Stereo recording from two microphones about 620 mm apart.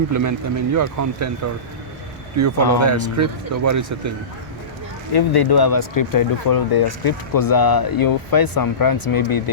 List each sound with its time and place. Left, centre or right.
0.1 s speech: right
2.4 s speech: right
5.1 s speech: left